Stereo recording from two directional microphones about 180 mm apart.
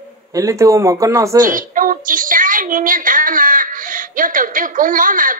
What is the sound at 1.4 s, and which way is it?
A woman's voice, 50° right (ahead or behind).